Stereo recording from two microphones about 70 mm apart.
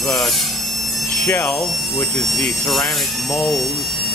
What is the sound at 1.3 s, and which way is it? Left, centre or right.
Speech, left.